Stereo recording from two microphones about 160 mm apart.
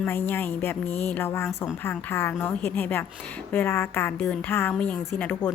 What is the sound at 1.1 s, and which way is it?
A woman's voice, 15° left (ahead or behind).